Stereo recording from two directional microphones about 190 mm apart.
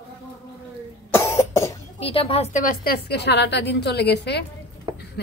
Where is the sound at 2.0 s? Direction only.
30° left (ahead or behind).